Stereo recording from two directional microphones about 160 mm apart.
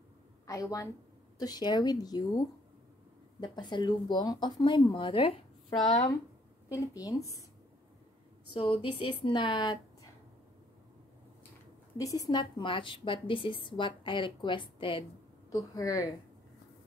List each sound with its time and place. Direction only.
0.5 s a woman's voice: 20° left (ahead or behind)
6.7 s speech: 20° left (ahead or behind)
8.5 s a woman's voice: 35° left (ahead or behind)
12.0 s a woman's voice: 20° left (ahead or behind)
15.5 s speech: 20° left (ahead or behind)